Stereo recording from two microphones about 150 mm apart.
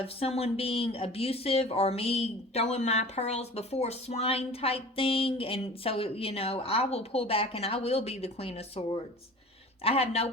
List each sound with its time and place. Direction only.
0.0 s speech: 40° left (ahead or behind)